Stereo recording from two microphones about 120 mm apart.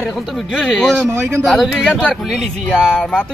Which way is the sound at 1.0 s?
20° right (ahead or behind).